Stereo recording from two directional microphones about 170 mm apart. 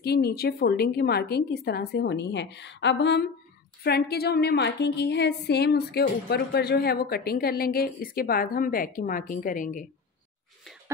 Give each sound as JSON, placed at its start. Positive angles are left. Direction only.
{"t": 0.0, "sound": "a woman's voice", "side_deg": 70}
{"t": 3.8, "sound": "a woman's voice", "side_deg": 70}